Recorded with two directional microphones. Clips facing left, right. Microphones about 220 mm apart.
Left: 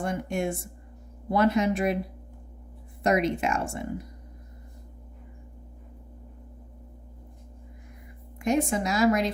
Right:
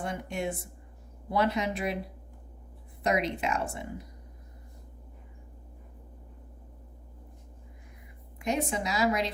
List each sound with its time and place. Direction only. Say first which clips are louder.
0.0 s a woman's voice: left 5 dB; 45° left (ahead or behind)
3.0 s a woman's voice: left 4 dB; 50° left (ahead or behind)
8.4 s a woman's voice: left 5 dB; 45° left (ahead or behind)